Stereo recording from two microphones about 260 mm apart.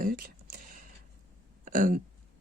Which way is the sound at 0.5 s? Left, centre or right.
Right.